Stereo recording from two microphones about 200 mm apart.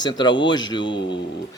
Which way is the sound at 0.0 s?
20° left (ahead or behind).